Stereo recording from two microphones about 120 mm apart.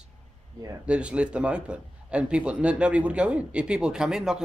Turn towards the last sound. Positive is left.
turn(degrees=-5)  # may be behind; listen again after turning